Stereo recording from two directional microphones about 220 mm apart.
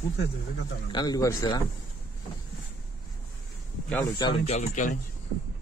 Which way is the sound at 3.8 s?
10° left (ahead or behind).